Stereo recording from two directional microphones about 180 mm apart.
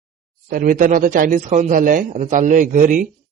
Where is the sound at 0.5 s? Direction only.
50° right (ahead or behind).